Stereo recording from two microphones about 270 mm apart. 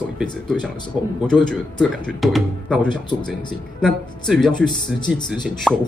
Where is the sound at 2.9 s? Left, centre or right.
Centre.